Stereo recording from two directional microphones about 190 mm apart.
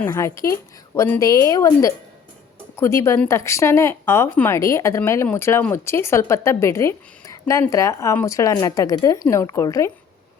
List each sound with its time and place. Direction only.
0.0 s speech: 15° left (ahead or behind)